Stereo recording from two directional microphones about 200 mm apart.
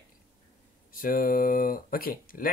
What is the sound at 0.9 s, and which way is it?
Speech, 45° left (ahead or behind).